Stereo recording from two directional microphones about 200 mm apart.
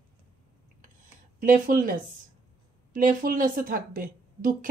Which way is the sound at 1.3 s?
45° right (ahead or behind).